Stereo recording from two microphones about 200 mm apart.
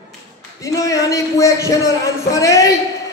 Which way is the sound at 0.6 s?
15° left (ahead or behind).